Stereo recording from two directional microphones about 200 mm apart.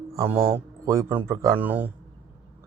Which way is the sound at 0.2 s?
10° right (ahead or behind).